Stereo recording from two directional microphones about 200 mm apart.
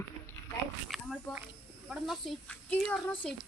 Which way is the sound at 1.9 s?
Centre (ahead or behind).